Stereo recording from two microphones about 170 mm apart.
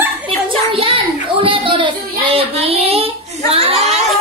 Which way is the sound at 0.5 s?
30° right (ahead or behind).